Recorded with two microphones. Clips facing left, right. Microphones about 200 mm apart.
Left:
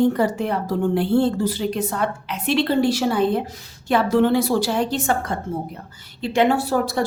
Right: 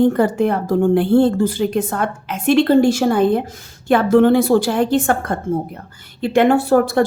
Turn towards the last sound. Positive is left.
turn(degrees=-55)  # may be behind; listen again after turning